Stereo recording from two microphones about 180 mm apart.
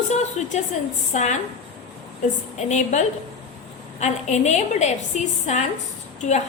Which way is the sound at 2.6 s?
40° left (ahead or behind).